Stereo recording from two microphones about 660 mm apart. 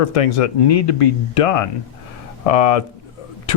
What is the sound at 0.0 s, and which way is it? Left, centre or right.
Speech, left.